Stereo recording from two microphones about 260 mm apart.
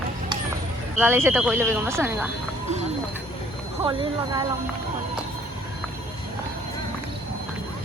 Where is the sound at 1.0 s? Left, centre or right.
Centre.